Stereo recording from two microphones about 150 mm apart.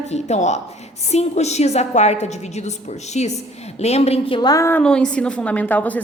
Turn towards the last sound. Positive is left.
turn(degrees=10)  # may be behind; listen again after turning